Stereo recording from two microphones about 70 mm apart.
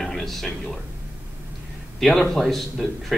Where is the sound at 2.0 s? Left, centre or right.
Centre.